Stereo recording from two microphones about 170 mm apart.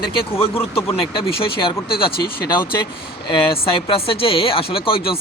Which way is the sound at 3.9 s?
30° left (ahead or behind).